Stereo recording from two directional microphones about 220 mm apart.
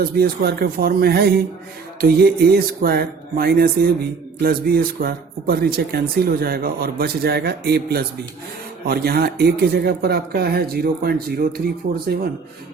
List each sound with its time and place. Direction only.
0.0 s speech: 45° right (ahead or behind)